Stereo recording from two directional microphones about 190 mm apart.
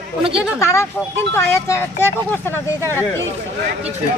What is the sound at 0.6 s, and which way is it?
Speech, 15° left (ahead or behind).